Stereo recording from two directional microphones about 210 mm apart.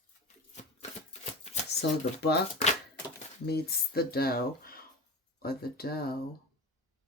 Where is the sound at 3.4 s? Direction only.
50° left (ahead or behind).